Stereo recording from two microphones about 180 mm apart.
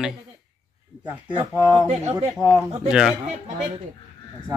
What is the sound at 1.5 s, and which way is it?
Speech, 15° right (ahead or behind).